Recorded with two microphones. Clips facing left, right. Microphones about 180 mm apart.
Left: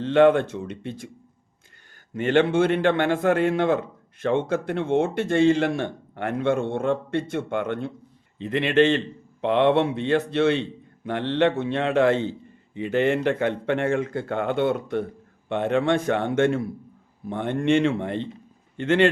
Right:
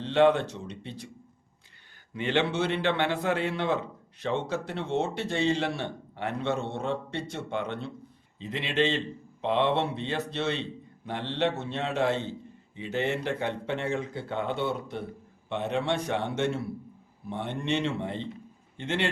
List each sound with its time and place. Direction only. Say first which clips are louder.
0.0 s a man's voice: left 5 dB; 50° left (ahead or behind)
2.1 s a man's voice: left 7 dB; 45° left (ahead or behind)